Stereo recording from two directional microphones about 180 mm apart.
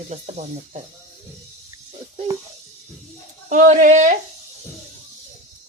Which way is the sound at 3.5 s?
45° right (ahead or behind).